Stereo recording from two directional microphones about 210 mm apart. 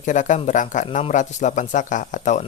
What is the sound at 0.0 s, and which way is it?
A man's voice, 35° left (ahead or behind).